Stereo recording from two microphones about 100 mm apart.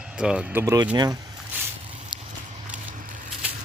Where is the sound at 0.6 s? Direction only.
35° right (ahead or behind).